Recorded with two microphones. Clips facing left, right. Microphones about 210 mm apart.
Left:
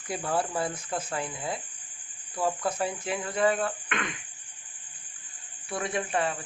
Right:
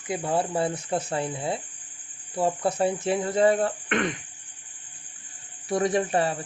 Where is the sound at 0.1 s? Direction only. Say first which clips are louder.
Right 3 dB; 25° right (ahead or behind); by 4.2 s 45° right (ahead or behind).